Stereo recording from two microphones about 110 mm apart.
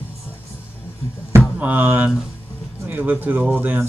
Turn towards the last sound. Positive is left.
turn(degrees=-15)  # may be behind; listen again after turning